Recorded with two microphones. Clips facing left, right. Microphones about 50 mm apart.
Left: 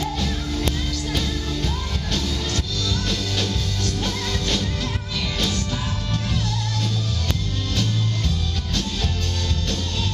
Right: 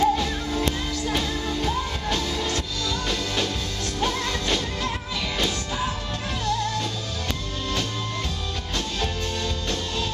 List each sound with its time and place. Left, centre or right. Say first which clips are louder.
0.0 s music: right 5 dB; centre